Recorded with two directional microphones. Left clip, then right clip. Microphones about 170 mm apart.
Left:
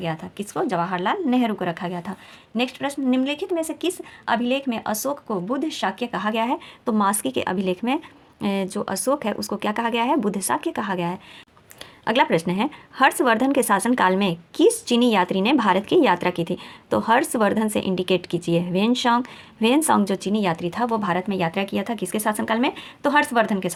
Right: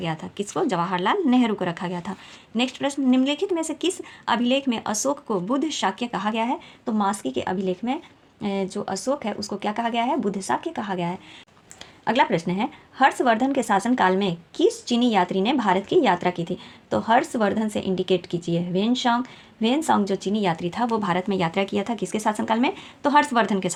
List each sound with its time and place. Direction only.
0.0 s a woman's voice: 10° left (ahead or behind)
6.8 s speech: 35° left (ahead or behind); by 23.7 s 10° left (ahead or behind)